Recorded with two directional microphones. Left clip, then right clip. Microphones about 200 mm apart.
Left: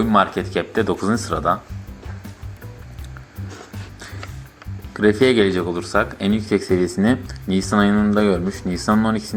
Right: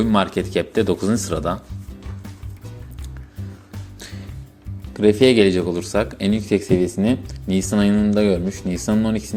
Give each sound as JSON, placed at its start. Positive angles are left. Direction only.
{"t": 0.0, "sound": "speech", "side_deg": -40}
{"t": 4.9, "sound": "speech", "side_deg": -20}